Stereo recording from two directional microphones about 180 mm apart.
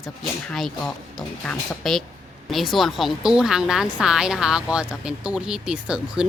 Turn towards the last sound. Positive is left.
turn(degrees=-5)  # may be behind; listen again after turning